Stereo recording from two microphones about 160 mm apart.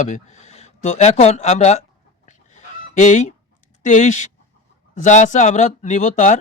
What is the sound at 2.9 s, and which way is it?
Goose, 50° left (ahead or behind).